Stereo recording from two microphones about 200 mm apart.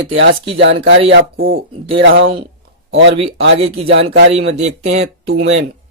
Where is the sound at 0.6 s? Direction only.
65° right (ahead or behind).